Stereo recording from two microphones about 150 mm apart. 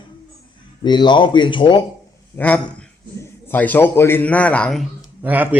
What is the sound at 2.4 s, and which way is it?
A man's voice, 10° left (ahead or behind).